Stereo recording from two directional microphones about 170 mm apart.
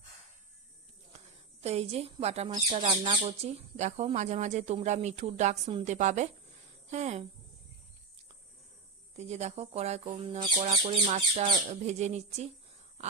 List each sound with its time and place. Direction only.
1.6 s a woman's voice: 40° right (ahead or behind)
9.1 s speech: 40° right (ahead or behind)